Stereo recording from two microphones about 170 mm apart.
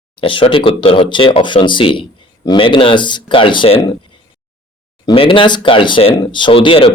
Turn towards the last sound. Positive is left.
turn(degrees=30)  # may be behind; listen again after turning